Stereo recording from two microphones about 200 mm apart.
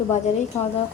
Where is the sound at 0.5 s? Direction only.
10° left (ahead or behind).